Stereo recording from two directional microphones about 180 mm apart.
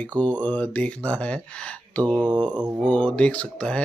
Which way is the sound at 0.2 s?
10° left (ahead or behind).